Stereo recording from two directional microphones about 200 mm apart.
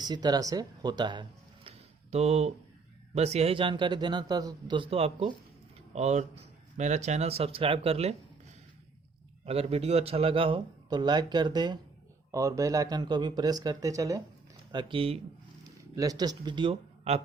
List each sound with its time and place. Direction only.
0.0 s speech: 20° right (ahead or behind)
9.5 s speech: 30° right (ahead or behind)